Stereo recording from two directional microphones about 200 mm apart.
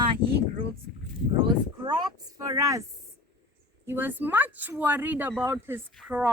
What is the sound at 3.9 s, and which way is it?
Speech, 10° right (ahead or behind).